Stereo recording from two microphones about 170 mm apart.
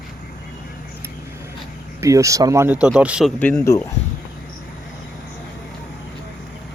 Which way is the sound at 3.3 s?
10° left (ahead or behind).